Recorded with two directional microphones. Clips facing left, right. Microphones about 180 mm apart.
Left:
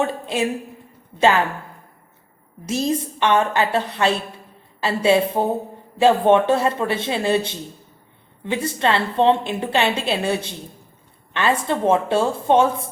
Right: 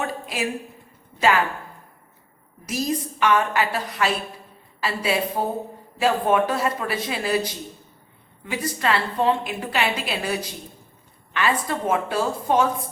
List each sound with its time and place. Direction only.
0.1 s a woman's voice: 25° left (ahead or behind)
2.6 s a woman's voice: 25° left (ahead or behind)